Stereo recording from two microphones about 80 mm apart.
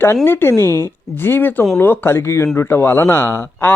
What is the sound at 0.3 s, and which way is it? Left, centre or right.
Speech, left.